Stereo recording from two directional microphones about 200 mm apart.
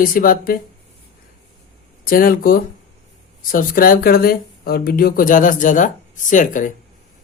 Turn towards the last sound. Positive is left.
turn(degrees=40)  # may be behind; listen again after turning